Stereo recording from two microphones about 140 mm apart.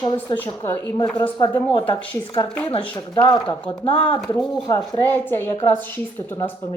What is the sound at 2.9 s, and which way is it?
Speech, 25° left (ahead or behind).